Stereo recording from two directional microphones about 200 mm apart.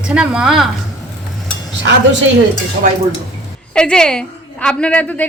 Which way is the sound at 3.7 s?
5° left (ahead or behind).